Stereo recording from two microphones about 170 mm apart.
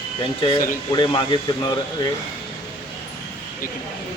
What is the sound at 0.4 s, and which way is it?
Speech, 30° left (ahead or behind).